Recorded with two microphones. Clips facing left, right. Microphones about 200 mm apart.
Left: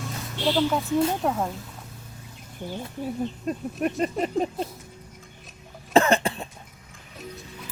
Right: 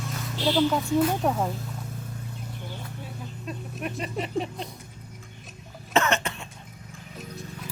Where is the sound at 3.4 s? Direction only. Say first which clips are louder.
Left 5 dB; 45° left (ahead or behind).